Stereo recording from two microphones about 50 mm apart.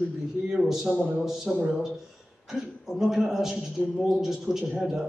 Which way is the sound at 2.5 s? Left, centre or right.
Centre.